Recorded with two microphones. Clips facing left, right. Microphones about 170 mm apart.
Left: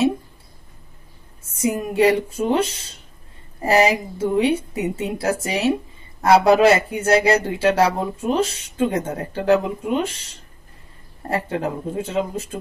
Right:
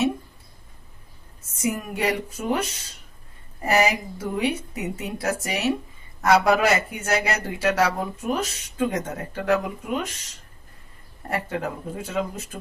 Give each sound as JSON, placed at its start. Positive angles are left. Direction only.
{"t": 1.4, "sound": "speech", "side_deg": 30}